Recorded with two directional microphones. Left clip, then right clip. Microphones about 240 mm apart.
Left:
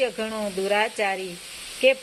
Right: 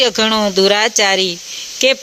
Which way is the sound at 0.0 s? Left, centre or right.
Right.